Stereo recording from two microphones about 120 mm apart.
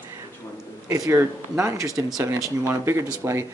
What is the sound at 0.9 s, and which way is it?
Speech, 25° right (ahead or behind).